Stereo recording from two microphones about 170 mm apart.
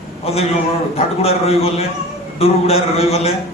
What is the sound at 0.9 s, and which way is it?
A man's voice, 35° left (ahead or behind).